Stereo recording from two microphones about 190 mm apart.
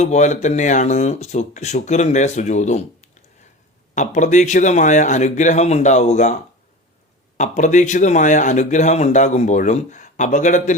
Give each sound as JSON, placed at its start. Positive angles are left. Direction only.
{"t": 0.0, "sound": "speech", "side_deg": 40}
{"t": 7.3, "sound": "speech", "side_deg": 40}